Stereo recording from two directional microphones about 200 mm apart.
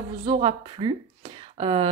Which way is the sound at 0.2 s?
25° right (ahead or behind).